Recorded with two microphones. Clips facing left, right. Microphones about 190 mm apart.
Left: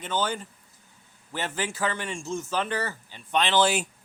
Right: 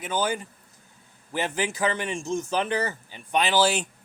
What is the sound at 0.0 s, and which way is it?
Speech, 10° right (ahead or behind).